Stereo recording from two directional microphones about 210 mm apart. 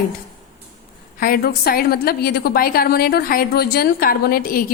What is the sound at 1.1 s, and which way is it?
A woman's voice, 45° left (ahead or behind).